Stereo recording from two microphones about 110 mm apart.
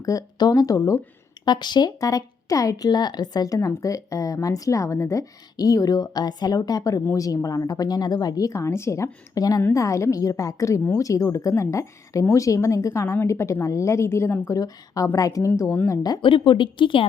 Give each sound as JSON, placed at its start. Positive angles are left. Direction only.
{"t": 0.0, "sound": "speech", "side_deg": 30}
{"t": 1.5, "sound": "a woman's voice", "side_deg": 40}
{"t": 14.5, "sound": "a woman's voice", "side_deg": 30}
{"t": 16.0, "sound": "a woman's voice", "side_deg": 40}